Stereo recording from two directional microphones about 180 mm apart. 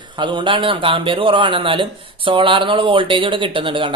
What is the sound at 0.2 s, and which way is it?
A man's voice, 25° right (ahead or behind).